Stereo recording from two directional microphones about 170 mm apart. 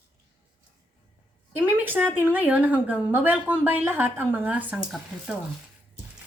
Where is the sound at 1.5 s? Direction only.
10° right (ahead or behind).